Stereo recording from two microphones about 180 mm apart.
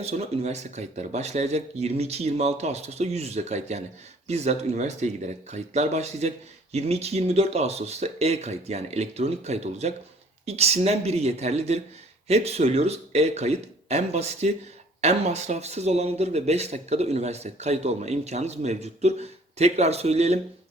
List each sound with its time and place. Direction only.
0.0 s speech: 35° right (ahead or behind)